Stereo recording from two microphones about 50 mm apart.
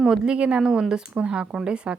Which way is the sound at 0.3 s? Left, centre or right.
Right.